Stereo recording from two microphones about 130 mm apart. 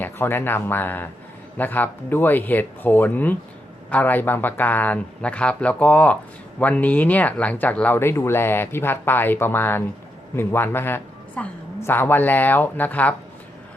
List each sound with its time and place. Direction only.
0.0 s speech: 15° left (ahead or behind)